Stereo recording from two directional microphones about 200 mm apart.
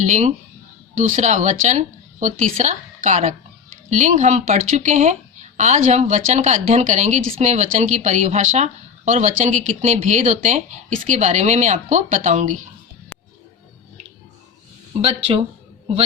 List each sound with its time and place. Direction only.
0.0 s a woman's voice: 35° right (ahead or behind)
13.1 s music: 10° left (ahead or behind)
15.0 s speech: 30° right (ahead or behind)